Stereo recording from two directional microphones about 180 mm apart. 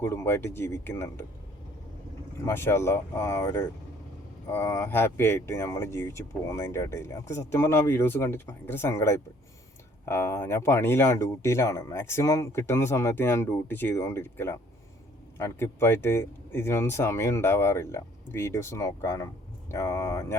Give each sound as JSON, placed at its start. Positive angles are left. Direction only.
{"t": 0.0, "sound": "speech", "side_deg": 15}
{"t": 2.4, "sound": "speech", "side_deg": 15}